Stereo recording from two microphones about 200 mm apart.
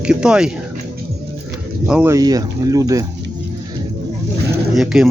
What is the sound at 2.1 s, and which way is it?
Speech, 20° right (ahead or behind).